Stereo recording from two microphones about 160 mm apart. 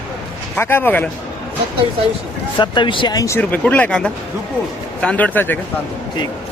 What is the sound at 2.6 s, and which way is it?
Speech, 30° left (ahead or behind).